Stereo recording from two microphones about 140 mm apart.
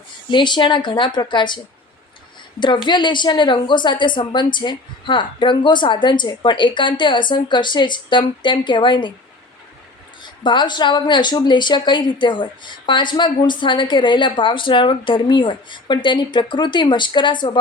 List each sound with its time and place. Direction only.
0.3 s speech: 35° left (ahead or behind)
10.2 s speech: 35° left (ahead or behind)